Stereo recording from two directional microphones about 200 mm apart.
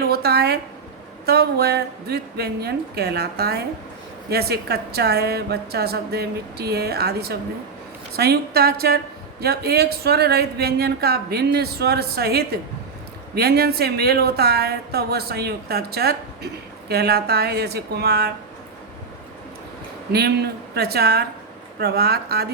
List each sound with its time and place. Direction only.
0.0 s a woman's voice: 50° right (ahead or behind)
20.7 s speech: 55° right (ahead or behind)